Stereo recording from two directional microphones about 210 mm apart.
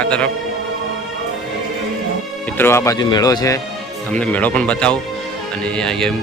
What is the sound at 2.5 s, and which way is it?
A man's voice, 10° left (ahead or behind).